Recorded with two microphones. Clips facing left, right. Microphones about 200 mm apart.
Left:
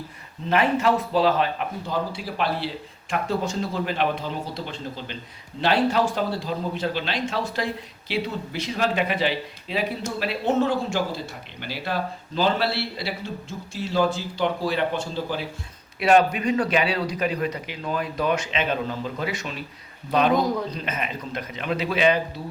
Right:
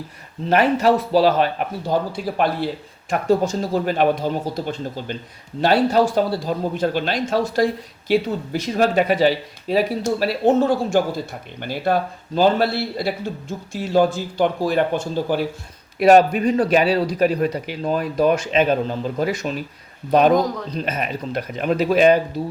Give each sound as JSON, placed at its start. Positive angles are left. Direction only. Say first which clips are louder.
{"t": 0.5, "sound": "a man's voice", "louder": "right 4 dB", "side_deg": -40}